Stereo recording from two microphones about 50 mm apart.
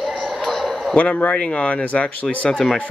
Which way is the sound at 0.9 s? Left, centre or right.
Left.